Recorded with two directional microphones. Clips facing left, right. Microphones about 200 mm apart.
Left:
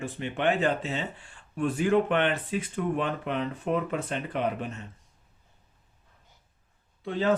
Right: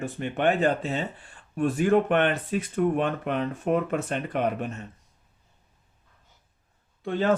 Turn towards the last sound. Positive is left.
turn(degrees=-55)  # may be behind; listen again after turning